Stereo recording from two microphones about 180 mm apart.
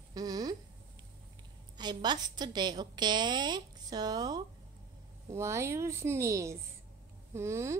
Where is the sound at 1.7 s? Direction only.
25° right (ahead or behind).